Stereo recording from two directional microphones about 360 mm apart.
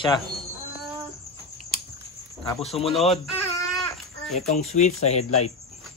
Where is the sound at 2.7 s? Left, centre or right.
Centre.